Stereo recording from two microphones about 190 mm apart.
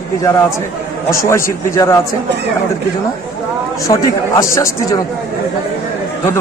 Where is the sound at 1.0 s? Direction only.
15° left (ahead or behind).